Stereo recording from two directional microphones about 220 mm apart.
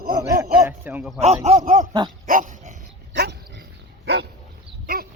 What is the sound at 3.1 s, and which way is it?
Dog, 50° right (ahead or behind).